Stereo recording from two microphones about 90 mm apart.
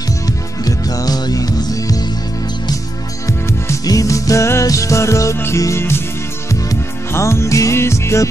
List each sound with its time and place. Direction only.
0.7 s music: 45° left (ahead or behind)
3.3 s music: 30° left (ahead or behind)